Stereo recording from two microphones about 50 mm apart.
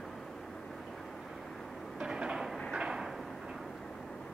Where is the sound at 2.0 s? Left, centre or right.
Centre.